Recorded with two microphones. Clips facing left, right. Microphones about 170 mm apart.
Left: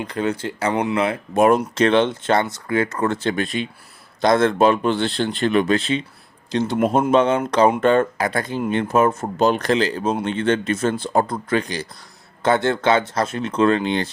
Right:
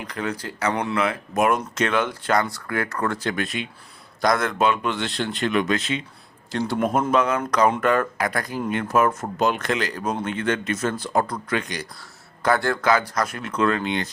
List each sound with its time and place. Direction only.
0.0 s speech: 25° left (ahead or behind)
6.5 s speech: 20° left (ahead or behind)